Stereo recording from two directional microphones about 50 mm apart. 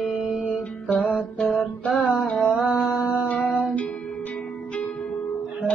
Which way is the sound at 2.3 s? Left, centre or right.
Right.